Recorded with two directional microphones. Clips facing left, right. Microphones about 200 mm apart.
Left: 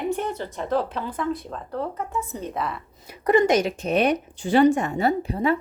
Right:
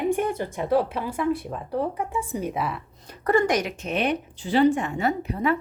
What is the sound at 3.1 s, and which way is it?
A woman's voice, 15° left (ahead or behind).